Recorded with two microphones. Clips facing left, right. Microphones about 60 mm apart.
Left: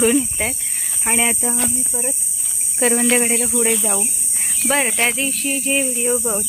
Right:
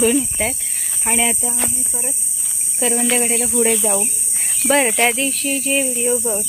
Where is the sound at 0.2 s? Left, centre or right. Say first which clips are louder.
Right 1 dB; centre.